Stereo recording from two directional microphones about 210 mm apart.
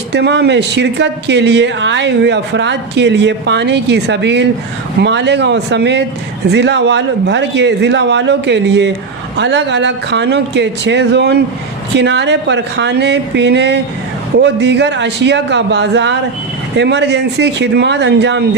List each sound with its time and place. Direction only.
0.1 s speech: 55° right (ahead or behind)